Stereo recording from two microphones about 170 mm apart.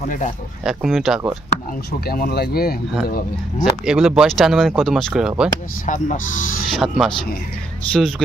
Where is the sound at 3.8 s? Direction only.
5° right (ahead or behind).